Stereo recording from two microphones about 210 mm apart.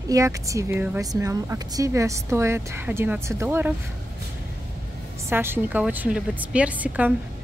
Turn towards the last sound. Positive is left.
turn(degrees=-5)  # may be behind; listen again after turning